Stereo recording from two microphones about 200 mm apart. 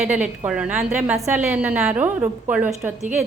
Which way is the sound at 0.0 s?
5° right (ahead or behind).